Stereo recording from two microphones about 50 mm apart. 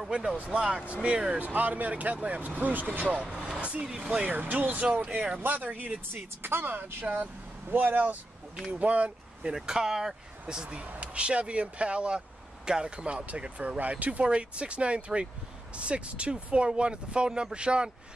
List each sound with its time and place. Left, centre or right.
0.1 s speech: centre
1.4 s speech: right
3.3 s speech: centre
4.4 s speech: right; by 17.9 s centre